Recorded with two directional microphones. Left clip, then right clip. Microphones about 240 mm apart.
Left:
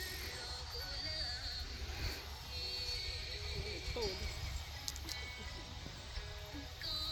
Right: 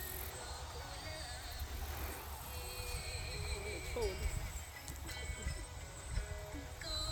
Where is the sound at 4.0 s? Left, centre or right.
Left.